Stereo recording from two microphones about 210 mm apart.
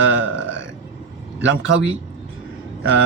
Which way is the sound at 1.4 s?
60° right (ahead or behind).